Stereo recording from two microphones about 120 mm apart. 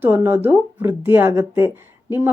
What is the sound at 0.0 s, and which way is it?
A woman's voice, 20° right (ahead or behind).